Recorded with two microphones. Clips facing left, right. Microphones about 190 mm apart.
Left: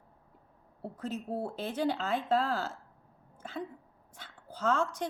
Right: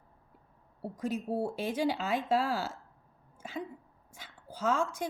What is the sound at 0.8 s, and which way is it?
Speech, 10° right (ahead or behind).